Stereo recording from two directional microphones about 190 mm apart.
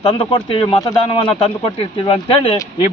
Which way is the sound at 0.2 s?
25° left (ahead or behind).